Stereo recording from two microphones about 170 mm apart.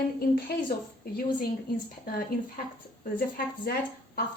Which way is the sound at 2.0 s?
60° left (ahead or behind).